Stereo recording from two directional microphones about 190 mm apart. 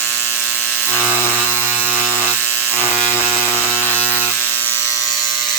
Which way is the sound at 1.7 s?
10° right (ahead or behind).